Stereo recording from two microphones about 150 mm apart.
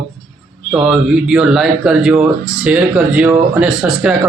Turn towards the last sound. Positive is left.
turn(degrees=-5)  # may be behind; listen again after turning